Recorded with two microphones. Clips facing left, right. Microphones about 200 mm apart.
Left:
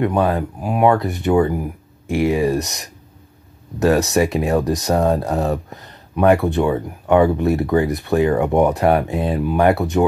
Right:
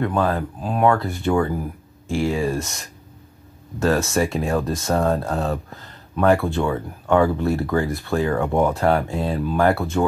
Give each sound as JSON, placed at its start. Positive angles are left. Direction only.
{"t": 0.0, "sound": "speech", "side_deg": 20}